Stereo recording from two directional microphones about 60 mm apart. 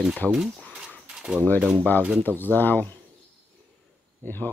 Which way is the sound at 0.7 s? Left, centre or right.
Centre.